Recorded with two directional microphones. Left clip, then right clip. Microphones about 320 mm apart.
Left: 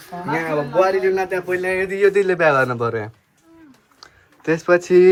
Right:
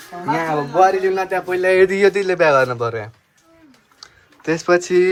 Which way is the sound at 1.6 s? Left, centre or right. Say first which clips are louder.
Right 7 dB; right.